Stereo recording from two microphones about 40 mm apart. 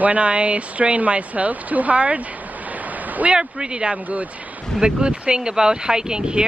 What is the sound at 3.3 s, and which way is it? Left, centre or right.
Speech, centre.